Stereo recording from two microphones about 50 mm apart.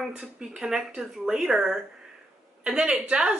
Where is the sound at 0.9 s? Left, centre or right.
Centre.